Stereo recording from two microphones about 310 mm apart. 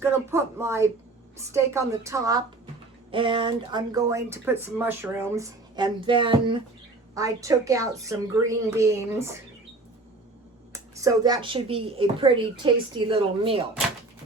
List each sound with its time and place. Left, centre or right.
0.0 s speech: centre
10.7 s a woman's voice: centre